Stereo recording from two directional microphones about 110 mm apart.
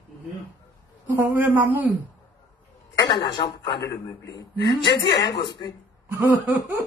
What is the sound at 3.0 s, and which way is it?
Speech, 40° left (ahead or behind).